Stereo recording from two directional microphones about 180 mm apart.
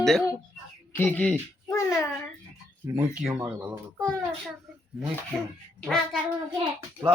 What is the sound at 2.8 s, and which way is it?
Speech, 15° right (ahead or behind).